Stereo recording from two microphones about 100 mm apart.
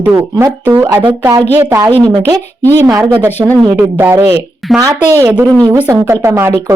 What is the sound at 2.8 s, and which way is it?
A woman's voice, 25° right (ahead or behind).